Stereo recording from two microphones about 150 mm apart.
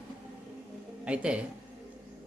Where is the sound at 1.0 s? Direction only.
5° right (ahead or behind).